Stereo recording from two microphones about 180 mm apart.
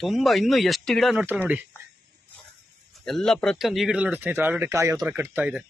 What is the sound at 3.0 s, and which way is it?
Speech, 5° left (ahead or behind).